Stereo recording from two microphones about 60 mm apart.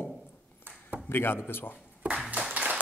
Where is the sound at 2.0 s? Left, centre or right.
Right.